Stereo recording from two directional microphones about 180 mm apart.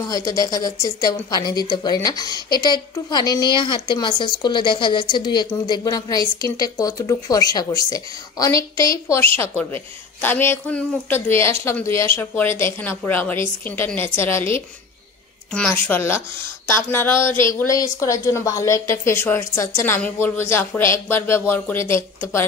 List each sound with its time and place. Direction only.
0.1 s a woman's voice: 20° left (ahead or behind)